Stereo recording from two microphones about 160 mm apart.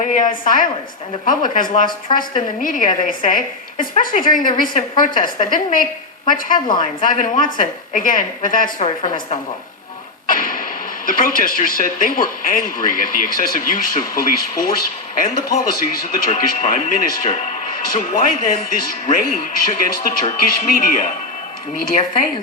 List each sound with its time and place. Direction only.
0.0 s a woman's voice: 55° left (ahead or behind)
10.2 s music: 60° left (ahead or behind)
11.0 s speech: 60° left (ahead or behind)